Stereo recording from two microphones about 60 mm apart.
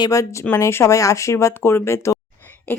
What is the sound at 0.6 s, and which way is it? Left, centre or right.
Speech, left.